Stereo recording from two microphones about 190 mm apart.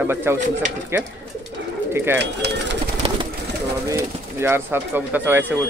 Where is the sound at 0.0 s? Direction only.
10° right (ahead or behind).